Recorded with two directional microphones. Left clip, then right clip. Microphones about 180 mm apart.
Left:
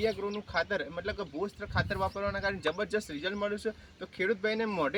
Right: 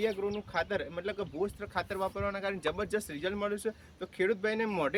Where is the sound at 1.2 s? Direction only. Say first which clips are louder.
Right 1 dB; 15° right (ahead or behind).